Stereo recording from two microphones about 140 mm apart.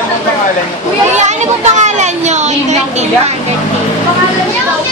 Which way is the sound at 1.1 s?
55° right (ahead or behind).